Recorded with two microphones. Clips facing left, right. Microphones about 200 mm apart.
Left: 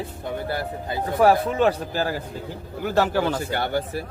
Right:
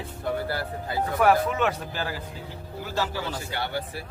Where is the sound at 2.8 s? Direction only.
60° left (ahead or behind).